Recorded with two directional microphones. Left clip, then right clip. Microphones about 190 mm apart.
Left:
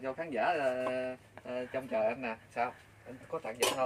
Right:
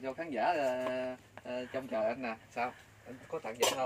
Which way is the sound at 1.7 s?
15° left (ahead or behind).